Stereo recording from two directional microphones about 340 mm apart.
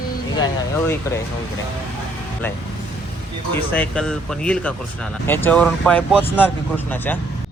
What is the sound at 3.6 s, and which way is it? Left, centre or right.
Speech, centre.